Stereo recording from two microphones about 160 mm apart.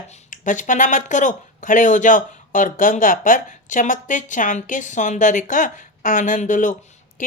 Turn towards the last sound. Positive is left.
turn(degrees=55)  # may be behind; listen again after turning